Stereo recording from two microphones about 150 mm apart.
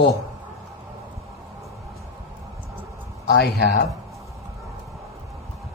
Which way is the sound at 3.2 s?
90° left.